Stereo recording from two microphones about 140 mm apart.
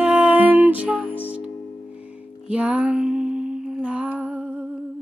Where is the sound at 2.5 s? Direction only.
10° right (ahead or behind).